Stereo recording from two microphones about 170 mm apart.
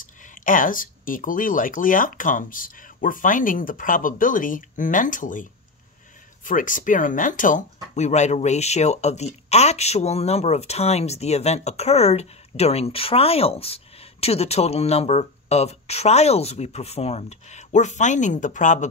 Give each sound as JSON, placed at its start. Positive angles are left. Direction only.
{"t": 0.3, "sound": "speech", "side_deg": 50}